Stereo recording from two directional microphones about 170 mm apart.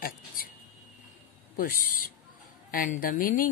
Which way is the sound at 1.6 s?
55° left (ahead or behind).